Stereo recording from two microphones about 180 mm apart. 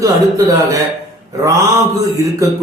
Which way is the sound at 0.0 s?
20° right (ahead or behind).